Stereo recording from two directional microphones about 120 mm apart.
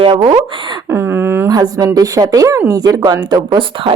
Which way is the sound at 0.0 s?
45° right (ahead or behind).